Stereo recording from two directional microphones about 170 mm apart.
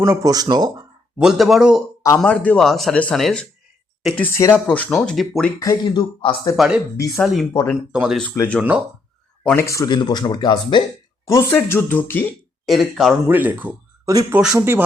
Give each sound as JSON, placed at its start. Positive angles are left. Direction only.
{"t": 0.0, "sound": "speech", "side_deg": -20}
{"t": 1.2, "sound": "speech", "side_deg": 0}
{"t": 2.0, "sound": "speech", "side_deg": 10}
{"t": 5.5, "sound": "speech", "side_deg": 25}
{"t": 6.6, "sound": "speech", "side_deg": -5}
{"t": 7.5, "sound": "speech", "side_deg": 20}
{"t": 7.9, "sound": "speech", "side_deg": -5}
{"t": 9.6, "sound": "speech", "side_deg": 20}
{"t": 11.5, "sound": "speech", "side_deg": 10}
{"t": 12.6, "sound": "speech", "side_deg": 0}
{"t": 14.1, "sound": "speech", "side_deg": -20}